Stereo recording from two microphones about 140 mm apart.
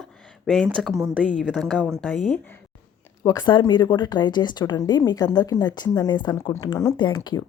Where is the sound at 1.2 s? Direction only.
5° left (ahead or behind).